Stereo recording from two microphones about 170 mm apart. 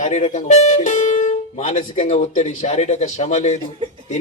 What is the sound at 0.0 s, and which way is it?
A man's voice, 45° left (ahead or behind).